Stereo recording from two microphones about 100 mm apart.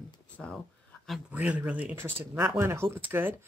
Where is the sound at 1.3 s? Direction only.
15° right (ahead or behind).